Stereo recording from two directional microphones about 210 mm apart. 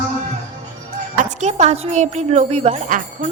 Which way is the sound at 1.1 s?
35° right (ahead or behind).